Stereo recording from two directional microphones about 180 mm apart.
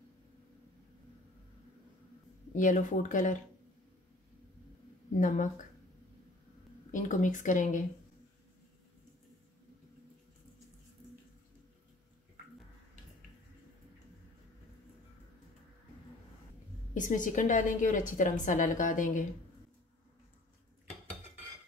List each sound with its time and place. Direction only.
2.5 s a woman's voice: 45° left (ahead or behind)
5.2 s a woman's voice: 45° left (ahead or behind)
6.9 s a woman's voice: 45° left (ahead or behind)
16.9 s a woman's voice: 45° left (ahead or behind)